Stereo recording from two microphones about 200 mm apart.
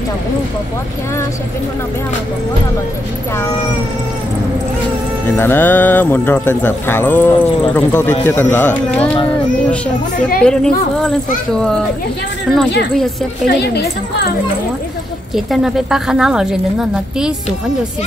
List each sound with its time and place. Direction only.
5.4 s speech: 10° left (ahead or behind)
10.4 s speech: 5° left (ahead or behind)
13.5 s speech: 55° left (ahead or behind)
15.3 s speech: centre (ahead or behind)